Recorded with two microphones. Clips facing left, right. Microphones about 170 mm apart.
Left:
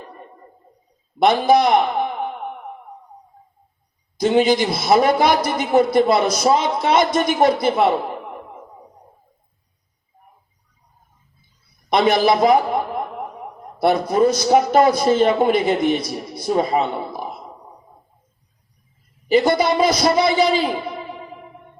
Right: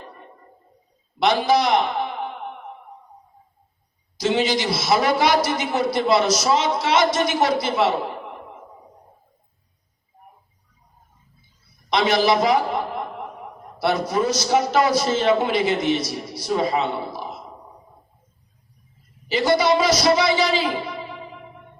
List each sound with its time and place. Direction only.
1.2 s a man's voice: 50° left (ahead or behind)
4.2 s a man's voice: 55° left (ahead or behind)
11.9 s a man's voice: 55° left (ahead or behind)
19.3 s a man's voice: 55° left (ahead or behind)